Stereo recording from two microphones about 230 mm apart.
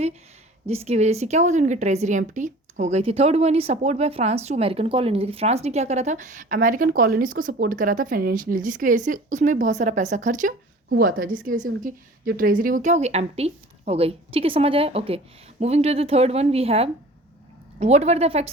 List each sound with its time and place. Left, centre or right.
0.7 s a woman's voice: right